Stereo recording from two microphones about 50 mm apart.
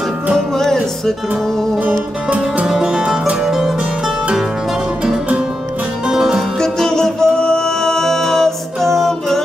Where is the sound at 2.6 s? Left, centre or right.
Centre.